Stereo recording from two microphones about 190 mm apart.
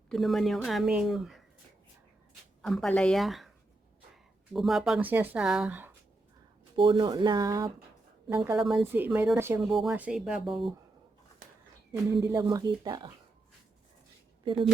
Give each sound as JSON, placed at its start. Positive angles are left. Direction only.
{"t": 0.1, "sound": "speech", "side_deg": 0}
{"t": 2.6, "sound": "speech", "side_deg": 0}
{"t": 4.5, "sound": "speech", "side_deg": 0}
{"t": 6.7, "sound": "speech", "side_deg": -25}
{"t": 8.7, "sound": "a woman's voice", "side_deg": -10}
{"t": 11.9, "sound": "speech", "side_deg": -20}